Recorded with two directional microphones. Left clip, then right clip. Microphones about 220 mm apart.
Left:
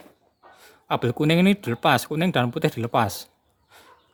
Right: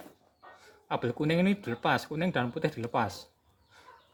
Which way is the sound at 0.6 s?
35° left (ahead or behind).